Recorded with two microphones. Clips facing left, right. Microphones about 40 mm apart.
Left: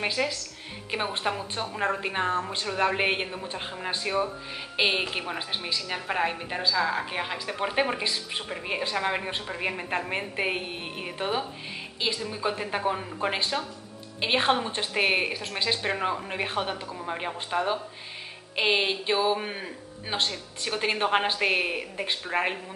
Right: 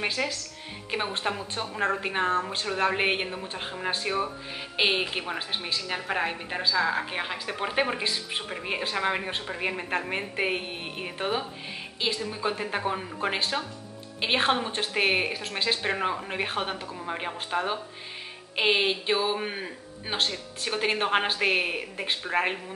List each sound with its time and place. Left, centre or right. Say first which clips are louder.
0.0 s a woman's voice: left 1 dB; centre